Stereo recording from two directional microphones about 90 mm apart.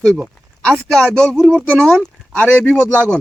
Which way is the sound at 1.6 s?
10° left (ahead or behind).